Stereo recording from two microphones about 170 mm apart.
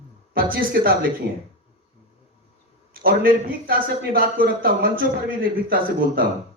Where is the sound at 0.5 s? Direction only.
60° right (ahead or behind).